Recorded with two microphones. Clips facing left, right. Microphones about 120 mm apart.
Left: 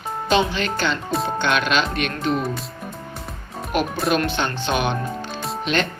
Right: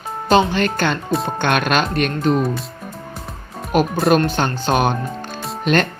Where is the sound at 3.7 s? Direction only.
45° right (ahead or behind).